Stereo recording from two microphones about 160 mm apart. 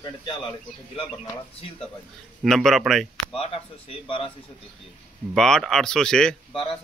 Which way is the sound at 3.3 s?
35° left (ahead or behind).